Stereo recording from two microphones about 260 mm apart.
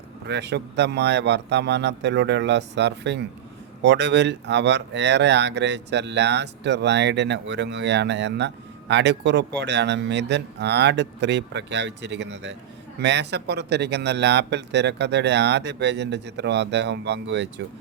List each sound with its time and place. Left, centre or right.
0.3 s speech: right